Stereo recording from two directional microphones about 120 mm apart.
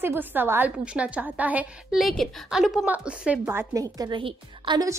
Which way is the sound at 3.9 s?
30° right (ahead or behind).